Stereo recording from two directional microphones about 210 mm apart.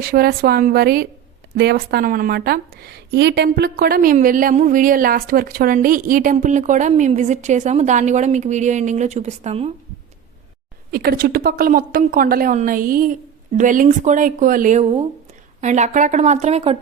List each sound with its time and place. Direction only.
0.0 s a woman's voice: 45° right (ahead or behind); by 9.7 s 30° right (ahead or behind)
10.9 s a woman's voice: 45° right (ahead or behind); by 16.8 s 30° right (ahead or behind)